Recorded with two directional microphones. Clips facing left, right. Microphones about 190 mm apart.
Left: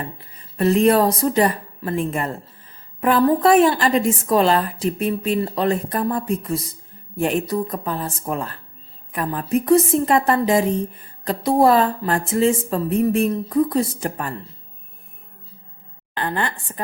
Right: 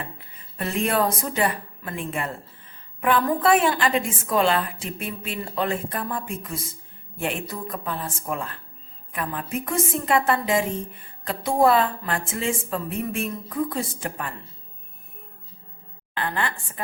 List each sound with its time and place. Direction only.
0.0 s a woman's voice: 40° left (ahead or behind)
16.1 s a woman's voice: 35° left (ahead or behind)